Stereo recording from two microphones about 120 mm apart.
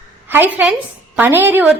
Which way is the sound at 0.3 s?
15° right (ahead or behind).